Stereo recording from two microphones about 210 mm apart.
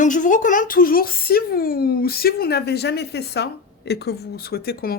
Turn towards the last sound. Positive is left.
turn(degrees=50)  # may be behind; listen again after turning